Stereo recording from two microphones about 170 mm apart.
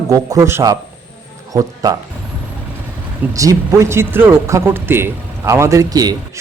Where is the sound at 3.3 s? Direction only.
20° right (ahead or behind).